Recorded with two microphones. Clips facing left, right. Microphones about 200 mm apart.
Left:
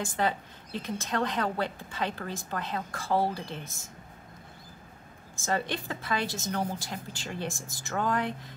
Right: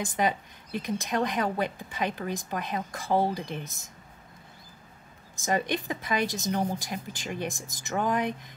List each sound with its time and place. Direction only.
0.0 s a woman's voice: 15° right (ahead or behind)
5.4 s a woman's voice: 15° right (ahead or behind)